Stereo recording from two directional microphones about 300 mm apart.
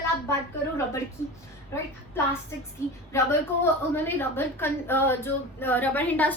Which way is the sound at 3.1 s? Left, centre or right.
Centre.